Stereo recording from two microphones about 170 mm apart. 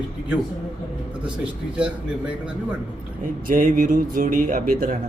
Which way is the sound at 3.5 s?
50° right (ahead or behind).